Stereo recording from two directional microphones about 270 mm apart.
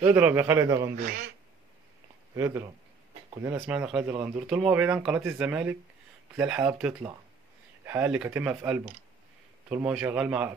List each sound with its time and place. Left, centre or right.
0.0 s a man's voice: centre
0.9 s speech: right
2.3 s a man's voice: centre